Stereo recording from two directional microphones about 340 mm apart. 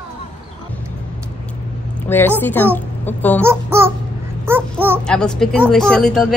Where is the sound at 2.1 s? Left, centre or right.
Centre.